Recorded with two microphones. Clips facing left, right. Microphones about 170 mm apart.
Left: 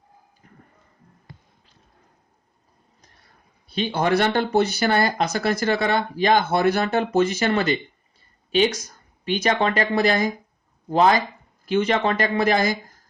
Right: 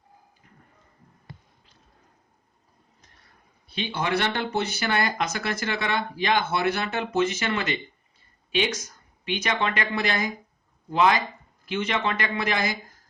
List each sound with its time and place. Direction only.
3.7 s speech: 40° left (ahead or behind)